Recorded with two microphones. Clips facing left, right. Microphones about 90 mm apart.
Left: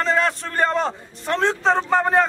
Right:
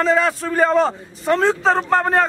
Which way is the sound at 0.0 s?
Centre (ahead or behind).